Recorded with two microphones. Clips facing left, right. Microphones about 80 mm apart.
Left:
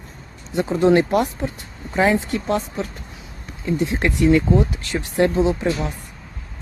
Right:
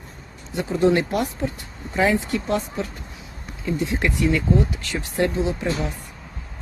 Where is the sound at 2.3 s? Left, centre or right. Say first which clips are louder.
Left 1 dB; left.